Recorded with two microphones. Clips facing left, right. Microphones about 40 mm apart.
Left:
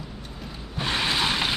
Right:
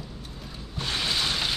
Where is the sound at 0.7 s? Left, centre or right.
Left.